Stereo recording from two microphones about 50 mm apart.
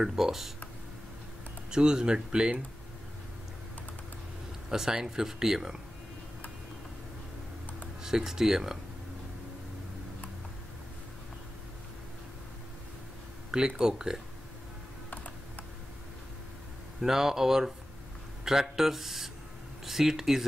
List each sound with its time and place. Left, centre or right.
0.0 s speech: centre
1.7 s speech: centre
4.6 s speech: centre
8.0 s speech: centre
13.5 s speech: centre
17.0 s speech: centre